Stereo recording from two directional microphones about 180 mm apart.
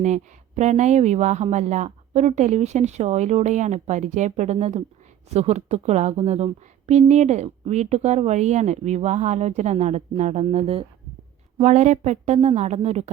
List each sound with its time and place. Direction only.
0.0 s a woman's voice: 40° right (ahead or behind)